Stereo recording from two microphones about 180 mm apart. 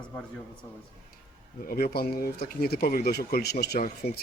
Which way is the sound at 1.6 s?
55° left (ahead or behind).